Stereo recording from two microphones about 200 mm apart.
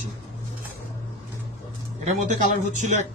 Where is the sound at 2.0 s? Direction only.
40° right (ahead or behind).